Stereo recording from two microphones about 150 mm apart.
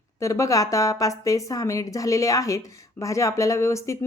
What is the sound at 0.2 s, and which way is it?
Speech, 20° left (ahead or behind).